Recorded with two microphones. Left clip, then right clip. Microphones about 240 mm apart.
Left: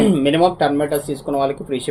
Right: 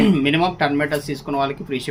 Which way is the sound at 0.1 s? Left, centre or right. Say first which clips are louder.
Left 3 dB; right.